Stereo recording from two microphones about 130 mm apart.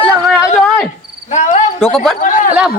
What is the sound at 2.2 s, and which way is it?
Speech, 90° left.